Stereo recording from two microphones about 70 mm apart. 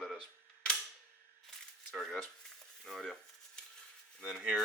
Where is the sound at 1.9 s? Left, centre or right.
Centre.